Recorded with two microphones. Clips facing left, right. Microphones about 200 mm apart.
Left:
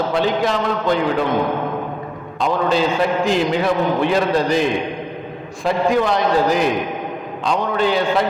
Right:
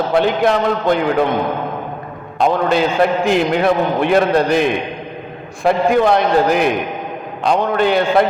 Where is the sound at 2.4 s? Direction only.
55° right (ahead or behind).